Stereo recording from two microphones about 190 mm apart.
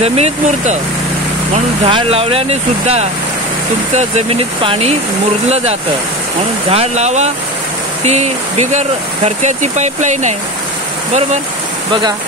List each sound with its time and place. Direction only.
0.0 s speech: 35° right (ahead or behind)
1.9 s speech: 30° right (ahead or behind)
6.7 s speech: 35° right (ahead or behind)